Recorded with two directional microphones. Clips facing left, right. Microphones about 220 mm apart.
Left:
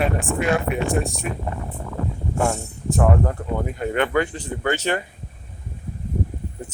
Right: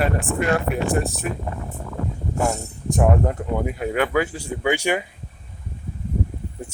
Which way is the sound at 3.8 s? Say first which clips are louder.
Left 1 dB; 5° right (ahead or behind).